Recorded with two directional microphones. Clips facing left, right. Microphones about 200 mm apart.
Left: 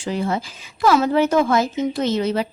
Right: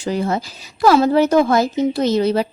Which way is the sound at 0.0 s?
40° right (ahead or behind).